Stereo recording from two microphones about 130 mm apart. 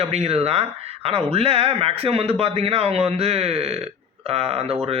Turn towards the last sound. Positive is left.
turn(degrees=-50)  # may be behind; listen again after turning